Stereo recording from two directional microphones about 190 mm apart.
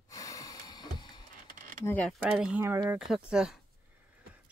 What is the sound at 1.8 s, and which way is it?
Speech, 10° left (ahead or behind).